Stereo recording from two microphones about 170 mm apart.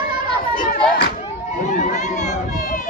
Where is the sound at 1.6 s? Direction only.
45° left (ahead or behind).